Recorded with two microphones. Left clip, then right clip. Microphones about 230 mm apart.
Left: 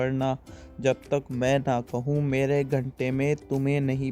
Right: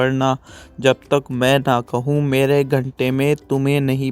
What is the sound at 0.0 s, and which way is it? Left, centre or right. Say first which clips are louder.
Speech: right 9 dB; right.